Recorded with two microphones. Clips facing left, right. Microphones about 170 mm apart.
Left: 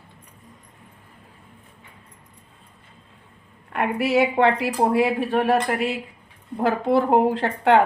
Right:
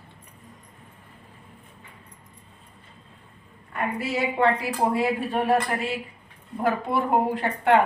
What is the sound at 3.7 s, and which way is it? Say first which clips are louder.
A woman's voice: left 6 dB; 70° left (ahead or behind).